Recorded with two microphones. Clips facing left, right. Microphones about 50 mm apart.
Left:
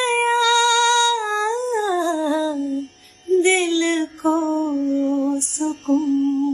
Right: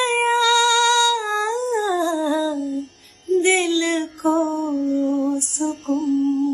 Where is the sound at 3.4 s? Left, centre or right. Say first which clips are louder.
Left 1 dB; left.